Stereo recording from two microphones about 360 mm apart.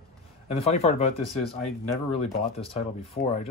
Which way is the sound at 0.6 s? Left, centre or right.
Centre.